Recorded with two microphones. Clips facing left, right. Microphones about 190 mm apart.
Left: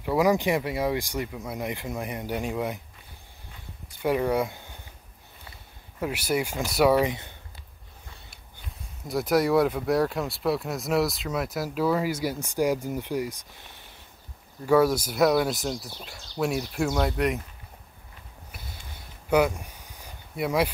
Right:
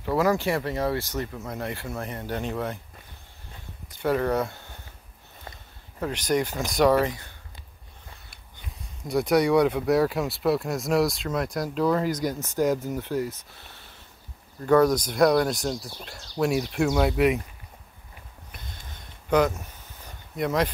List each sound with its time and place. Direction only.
0.0 s speech: 15° left (ahead or behind)
3.9 s speech: 10° left (ahead or behind)
5.9 s speech: 10° left (ahead or behind)
7.1 s speech: 20° left (ahead or behind)
9.0 s speech: centre (ahead or behind)
18.5 s a sound: 5° left (ahead or behind)